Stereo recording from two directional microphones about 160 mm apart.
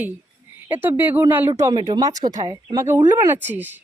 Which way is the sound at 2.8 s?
15° right (ahead or behind).